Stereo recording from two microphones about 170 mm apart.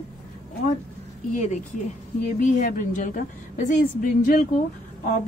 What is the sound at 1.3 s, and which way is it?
A woman's voice, 45° left (ahead or behind).